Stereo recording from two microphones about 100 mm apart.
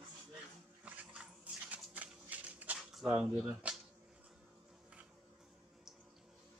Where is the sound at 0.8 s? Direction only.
10° right (ahead or behind).